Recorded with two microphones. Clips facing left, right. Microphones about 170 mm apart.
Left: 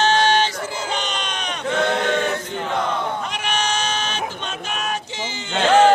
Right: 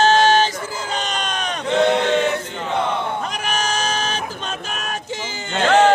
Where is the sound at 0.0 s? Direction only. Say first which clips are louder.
Right 3 dB; 45° right (ahead or behind).